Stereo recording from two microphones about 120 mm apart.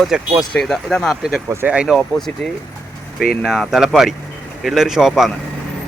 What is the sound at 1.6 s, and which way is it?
Speech, 10° right (ahead or behind).